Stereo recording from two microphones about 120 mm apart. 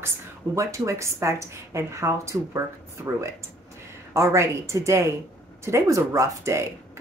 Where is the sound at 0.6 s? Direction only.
25° right (ahead or behind).